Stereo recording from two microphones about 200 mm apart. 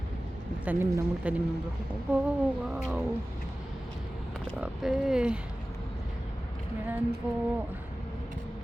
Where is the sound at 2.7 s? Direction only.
5° right (ahead or behind).